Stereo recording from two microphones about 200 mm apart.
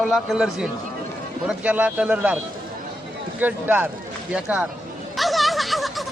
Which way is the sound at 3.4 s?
10° right (ahead or behind).